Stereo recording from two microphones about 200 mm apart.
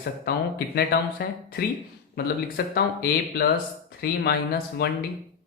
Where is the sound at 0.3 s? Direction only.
50° left (ahead or behind).